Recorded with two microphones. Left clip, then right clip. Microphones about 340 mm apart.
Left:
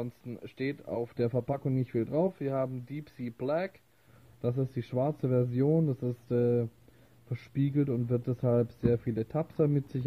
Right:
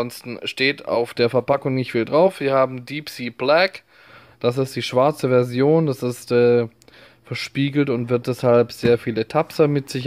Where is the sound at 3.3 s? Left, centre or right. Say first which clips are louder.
Right 15 dB; centre.